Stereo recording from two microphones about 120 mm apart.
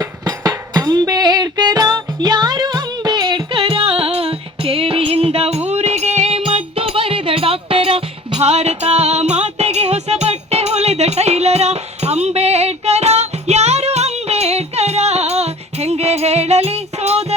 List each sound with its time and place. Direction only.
0.0 s music: 35° right (ahead or behind)
3.6 s music: 50° right (ahead or behind)